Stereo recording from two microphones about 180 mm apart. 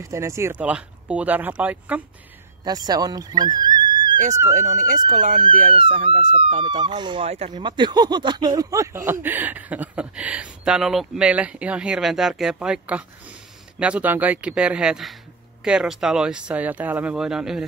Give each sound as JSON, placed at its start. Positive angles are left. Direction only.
{"t": 0.0, "sound": "speech", "side_deg": -15}
{"t": 2.6, "sound": "speech", "side_deg": -20}
{"t": 4.6, "sound": "speech", "side_deg": -45}
{"t": 5.8, "sound": "speech", "side_deg": -30}
{"t": 6.8, "sound": "speech", "side_deg": -25}
{"t": 7.2, "sound": "speech", "side_deg": -35}
{"t": 7.5, "sound": "speech", "side_deg": -25}